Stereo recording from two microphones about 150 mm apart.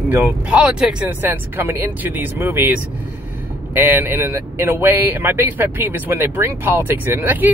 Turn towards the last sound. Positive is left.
turn(degrees=-15)  # may be behind; listen again after turning